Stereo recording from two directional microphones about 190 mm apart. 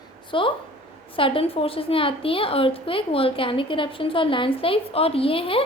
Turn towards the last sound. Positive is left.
turn(degrees=30)  # may be behind; listen again after turning